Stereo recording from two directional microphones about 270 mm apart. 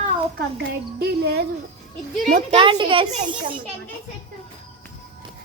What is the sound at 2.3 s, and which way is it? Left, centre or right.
Speech, right.